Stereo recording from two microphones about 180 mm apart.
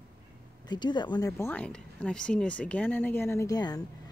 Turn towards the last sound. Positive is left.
turn(degrees=20)  # may be behind; listen again after turning